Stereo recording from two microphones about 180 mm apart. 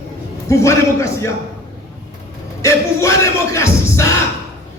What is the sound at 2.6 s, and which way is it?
A man's voice, 15° left (ahead or behind).